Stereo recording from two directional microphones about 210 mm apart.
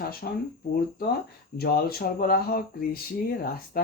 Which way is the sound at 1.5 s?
45° left (ahead or behind).